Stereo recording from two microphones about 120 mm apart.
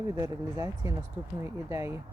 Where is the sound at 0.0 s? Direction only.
30° right (ahead or behind).